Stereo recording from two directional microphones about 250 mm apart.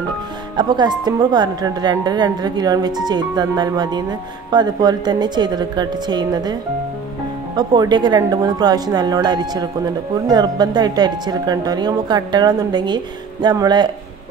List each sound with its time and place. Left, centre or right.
0.6 s a woman's voice: centre